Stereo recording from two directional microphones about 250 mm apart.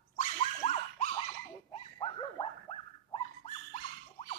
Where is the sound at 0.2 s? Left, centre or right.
Left.